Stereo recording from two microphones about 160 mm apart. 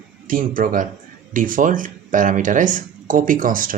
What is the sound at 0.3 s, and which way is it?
Speech, 60° right (ahead or behind).